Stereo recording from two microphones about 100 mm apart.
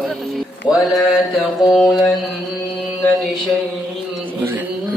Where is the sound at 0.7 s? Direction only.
45° left (ahead or behind).